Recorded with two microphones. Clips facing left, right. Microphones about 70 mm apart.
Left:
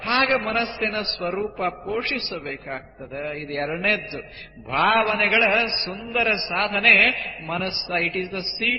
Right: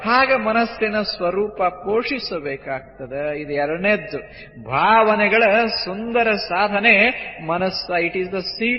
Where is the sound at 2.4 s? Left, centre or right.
Right.